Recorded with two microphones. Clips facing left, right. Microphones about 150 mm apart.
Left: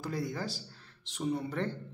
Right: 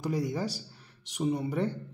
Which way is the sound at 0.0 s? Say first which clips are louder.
Right 5 dB; 15° right (ahead or behind).